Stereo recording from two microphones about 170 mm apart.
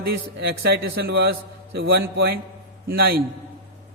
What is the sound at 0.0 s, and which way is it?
A man's voice, 65° right (ahead or behind).